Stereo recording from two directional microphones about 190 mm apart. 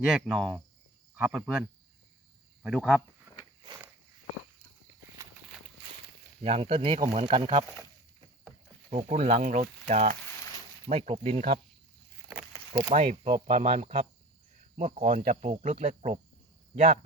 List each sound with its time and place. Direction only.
0.0 s cricket: 5° right (ahead or behind)
1.1 s speech: 5° right (ahead or behind)
2.6 s cricket: 5° right (ahead or behind)
6.4 s speech: 30° right (ahead or behind)
8.9 s speech: 30° right (ahead or behind)
12.9 s speech: 30° right (ahead or behind)
15.0 s speech: 40° right (ahead or behind)